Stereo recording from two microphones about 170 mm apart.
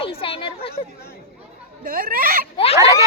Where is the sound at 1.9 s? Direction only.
55° right (ahead or behind).